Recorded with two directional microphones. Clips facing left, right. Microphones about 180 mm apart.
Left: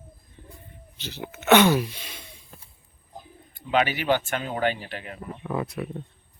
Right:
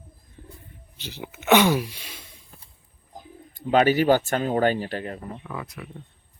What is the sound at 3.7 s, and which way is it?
Speech, 40° right (ahead or behind).